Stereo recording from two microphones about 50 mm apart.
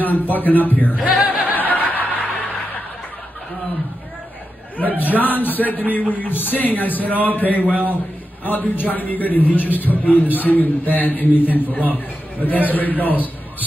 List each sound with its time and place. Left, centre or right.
0.0 s a man's voice: left
1.4 s snicker: left
4.7 s a man's voice: left